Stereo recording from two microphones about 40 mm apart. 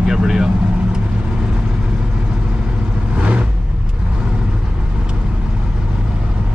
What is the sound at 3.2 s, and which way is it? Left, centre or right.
Vehicle, right.